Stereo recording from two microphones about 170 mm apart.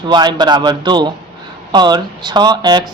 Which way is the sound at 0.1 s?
25° right (ahead or behind).